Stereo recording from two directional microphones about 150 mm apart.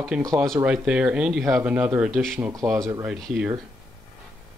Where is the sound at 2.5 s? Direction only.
20° right (ahead or behind).